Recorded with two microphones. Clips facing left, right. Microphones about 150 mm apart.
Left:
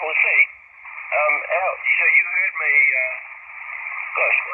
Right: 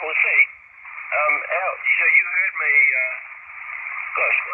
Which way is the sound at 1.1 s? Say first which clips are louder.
Left 3 dB; 25° left (ahead or behind).